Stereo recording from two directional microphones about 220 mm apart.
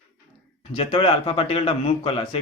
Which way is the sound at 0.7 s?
25° left (ahead or behind).